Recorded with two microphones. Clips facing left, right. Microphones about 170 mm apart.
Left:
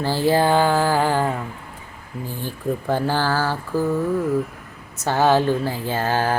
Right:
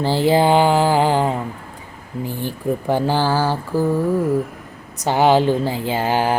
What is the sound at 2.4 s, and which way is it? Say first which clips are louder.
Speech: right 2 dB; 15° right (ahead or behind).